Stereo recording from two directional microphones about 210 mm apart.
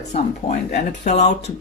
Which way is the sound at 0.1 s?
35° left (ahead or behind).